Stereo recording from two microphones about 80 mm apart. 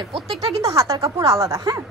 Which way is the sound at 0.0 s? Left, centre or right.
Right.